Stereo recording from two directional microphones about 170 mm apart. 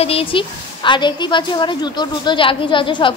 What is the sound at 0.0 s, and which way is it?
A woman's voice, 35° left (ahead or behind).